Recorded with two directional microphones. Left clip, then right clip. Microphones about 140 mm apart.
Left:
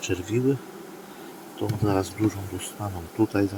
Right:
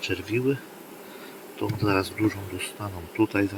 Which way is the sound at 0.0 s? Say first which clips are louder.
Even; 55° left (ahead or behind).